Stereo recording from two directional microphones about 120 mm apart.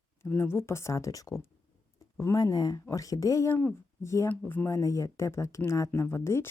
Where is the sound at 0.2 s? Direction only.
20° left (ahead or behind).